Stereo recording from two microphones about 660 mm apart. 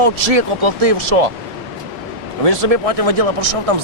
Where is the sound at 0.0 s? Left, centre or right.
Right.